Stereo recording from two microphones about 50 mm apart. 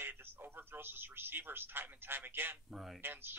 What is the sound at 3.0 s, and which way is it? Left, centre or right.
Speech, right.